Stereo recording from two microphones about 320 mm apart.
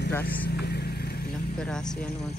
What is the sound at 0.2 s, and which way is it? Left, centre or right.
Vehicle, left.